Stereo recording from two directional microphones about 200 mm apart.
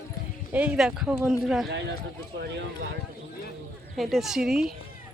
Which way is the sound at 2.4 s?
60° right (ahead or behind).